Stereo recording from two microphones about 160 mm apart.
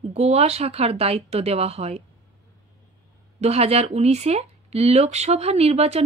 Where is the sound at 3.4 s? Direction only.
40° right (ahead or behind).